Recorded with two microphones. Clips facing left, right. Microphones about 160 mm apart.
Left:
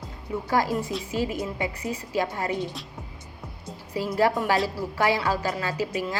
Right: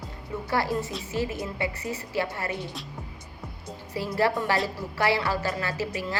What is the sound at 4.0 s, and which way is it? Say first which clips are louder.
A woman's voice: left 2 dB; 15° left (ahead or behind).